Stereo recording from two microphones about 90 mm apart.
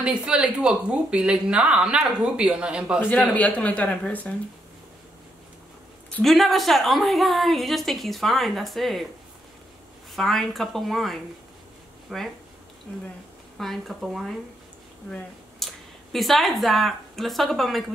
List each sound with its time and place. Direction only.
0.0 s speech: 10° right (ahead or behind)
3.3 s speech: 15° left (ahead or behind)
6.2 s a woman's voice: centre (ahead or behind)
10.1 s a woman's voice: centre (ahead or behind)
13.6 s a woman's voice: centre (ahead or behind)
15.6 s speech: centre (ahead or behind)